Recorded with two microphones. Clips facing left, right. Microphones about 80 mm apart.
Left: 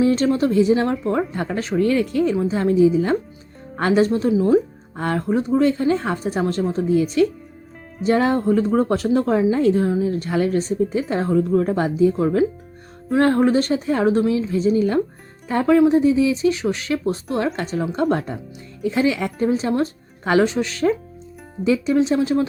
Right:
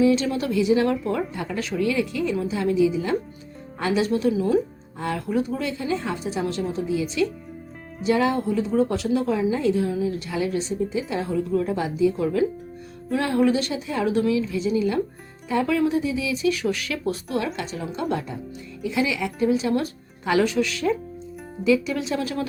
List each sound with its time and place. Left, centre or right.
0.0 s speech: left
4.9 s speech: left